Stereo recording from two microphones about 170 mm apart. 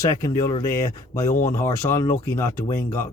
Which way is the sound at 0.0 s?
20° left (ahead or behind).